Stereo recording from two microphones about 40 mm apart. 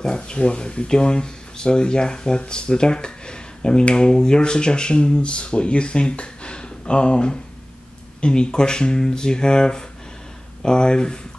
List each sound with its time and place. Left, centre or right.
0.0 s speech: left